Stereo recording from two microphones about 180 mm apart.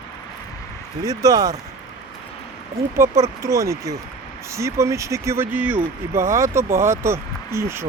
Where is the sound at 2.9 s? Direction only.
15° right (ahead or behind).